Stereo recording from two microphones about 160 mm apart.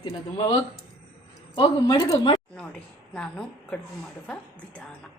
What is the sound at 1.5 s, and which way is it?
Speech, 25° left (ahead or behind).